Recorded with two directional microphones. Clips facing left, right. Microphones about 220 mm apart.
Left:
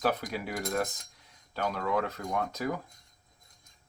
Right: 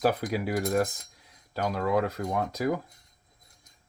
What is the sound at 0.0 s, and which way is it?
Speech, 35° right (ahead or behind).